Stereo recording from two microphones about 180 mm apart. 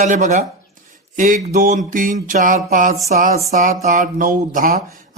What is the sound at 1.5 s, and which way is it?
A man's voice, 45° right (ahead or behind).